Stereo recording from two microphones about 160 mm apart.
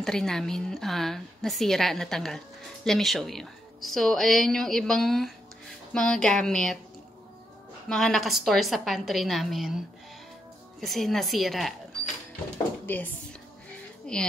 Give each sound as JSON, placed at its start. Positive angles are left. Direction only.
{"t": 0.0, "sound": "a woman's voice", "side_deg": 5}
{"t": 7.9, "sound": "a woman's voice", "side_deg": 0}
{"t": 12.8, "sound": "a woman's voice", "side_deg": 10}